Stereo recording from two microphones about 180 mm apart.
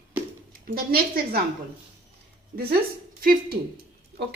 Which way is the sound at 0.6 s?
55° right (ahead or behind).